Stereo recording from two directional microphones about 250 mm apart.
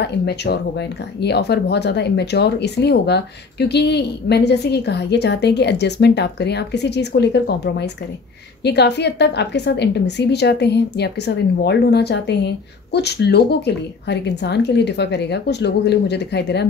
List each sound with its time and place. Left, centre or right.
0.0 s a woman's voice: left